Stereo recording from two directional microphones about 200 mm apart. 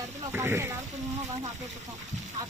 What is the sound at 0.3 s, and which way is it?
Speech, 10° right (ahead or behind).